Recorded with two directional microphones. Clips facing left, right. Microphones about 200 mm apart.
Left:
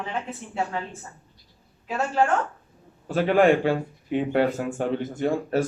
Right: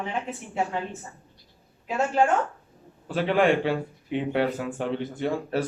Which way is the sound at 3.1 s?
45° left (ahead or behind).